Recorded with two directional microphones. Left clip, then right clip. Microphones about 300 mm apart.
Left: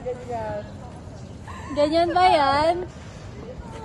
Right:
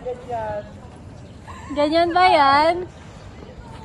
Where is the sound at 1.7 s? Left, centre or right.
Centre.